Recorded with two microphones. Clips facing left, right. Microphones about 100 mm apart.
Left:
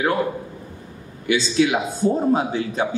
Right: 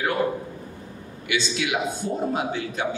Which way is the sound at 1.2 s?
35° left (ahead or behind).